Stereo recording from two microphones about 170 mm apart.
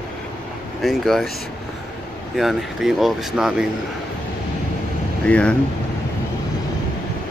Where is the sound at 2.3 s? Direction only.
Centre (ahead or behind).